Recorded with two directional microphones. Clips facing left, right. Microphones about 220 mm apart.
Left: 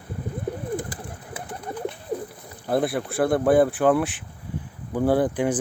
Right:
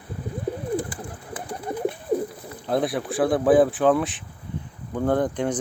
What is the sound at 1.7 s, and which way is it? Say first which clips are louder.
Bird: right 4 dB; 20° right (ahead or behind).